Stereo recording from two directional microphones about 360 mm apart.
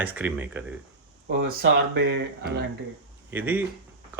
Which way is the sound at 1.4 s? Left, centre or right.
Right.